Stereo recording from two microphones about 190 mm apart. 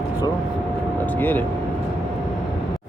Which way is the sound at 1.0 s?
10° left (ahead or behind).